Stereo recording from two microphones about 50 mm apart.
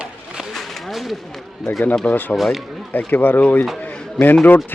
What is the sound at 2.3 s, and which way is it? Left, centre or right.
Speech, centre.